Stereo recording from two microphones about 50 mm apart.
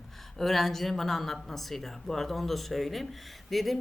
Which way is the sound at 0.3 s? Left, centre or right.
Centre.